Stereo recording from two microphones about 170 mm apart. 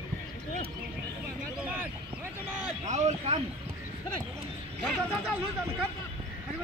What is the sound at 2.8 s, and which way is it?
Speech, 40° right (ahead or behind).